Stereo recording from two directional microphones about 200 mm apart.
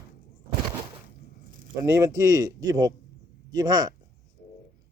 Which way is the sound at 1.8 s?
15° right (ahead or behind).